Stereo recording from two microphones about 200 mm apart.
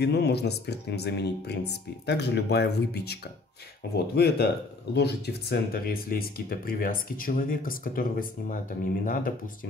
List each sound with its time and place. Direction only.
0.0 s speech: 55° left (ahead or behind)